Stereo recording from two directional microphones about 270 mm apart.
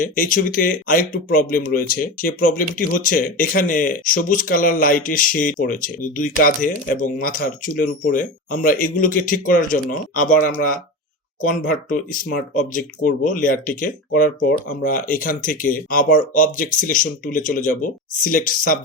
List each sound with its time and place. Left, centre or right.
0.0 s speech: left